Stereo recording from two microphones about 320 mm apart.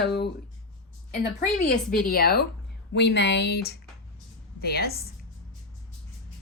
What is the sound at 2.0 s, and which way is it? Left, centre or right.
A woman's voice, left.